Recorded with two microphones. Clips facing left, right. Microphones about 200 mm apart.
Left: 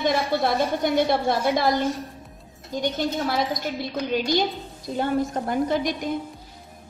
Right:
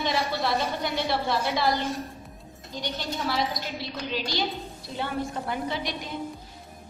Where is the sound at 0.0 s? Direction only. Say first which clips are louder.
Left 5 dB; 50° left (ahead or behind).